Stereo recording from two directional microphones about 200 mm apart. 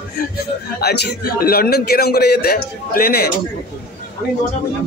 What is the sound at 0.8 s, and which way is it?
A man's voice, 50° left (ahead or behind).